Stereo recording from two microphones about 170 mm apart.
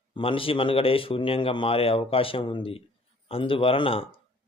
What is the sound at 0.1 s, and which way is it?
Speech, 30° left (ahead or behind).